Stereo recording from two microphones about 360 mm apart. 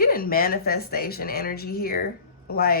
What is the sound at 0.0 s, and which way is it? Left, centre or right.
Speech, left.